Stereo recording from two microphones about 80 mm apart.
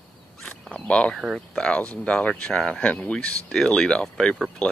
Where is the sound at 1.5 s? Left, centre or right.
Centre.